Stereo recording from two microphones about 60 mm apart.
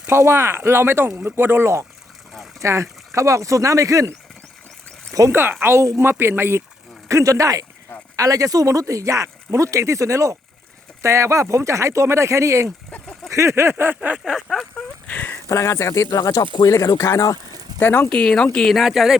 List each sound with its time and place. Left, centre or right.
0.1 s speech: right
5.3 s a sound: right
7.1 s speech: right
13.3 s a sound: right
14.3 s speech: centre
15.0 s a sound: left
15.4 s speech: left
16.1 s speech: left
17.7 s speech: left
18.1 s speech: centre
18.7 s a man's voice: centre